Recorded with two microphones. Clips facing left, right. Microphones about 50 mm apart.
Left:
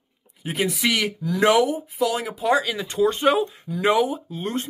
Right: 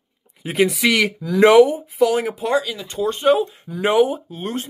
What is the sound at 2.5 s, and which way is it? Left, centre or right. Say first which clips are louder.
Speech: right 4 dB; centre.